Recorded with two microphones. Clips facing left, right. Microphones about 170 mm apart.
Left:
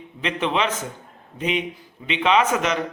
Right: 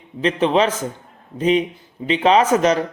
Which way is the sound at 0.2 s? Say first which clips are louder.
Right 7 dB; 35° right (ahead or behind).